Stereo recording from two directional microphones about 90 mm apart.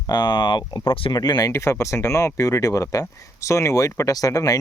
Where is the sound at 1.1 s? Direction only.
45° left (ahead or behind).